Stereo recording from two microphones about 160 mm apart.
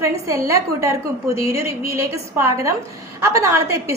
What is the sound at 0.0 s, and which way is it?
A woman's voice, 20° right (ahead or behind).